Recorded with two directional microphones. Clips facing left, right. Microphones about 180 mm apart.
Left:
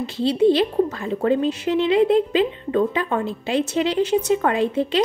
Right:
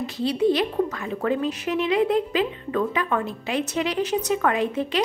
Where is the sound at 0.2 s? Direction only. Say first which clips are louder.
Left 4 dB; 30° left (ahead or behind).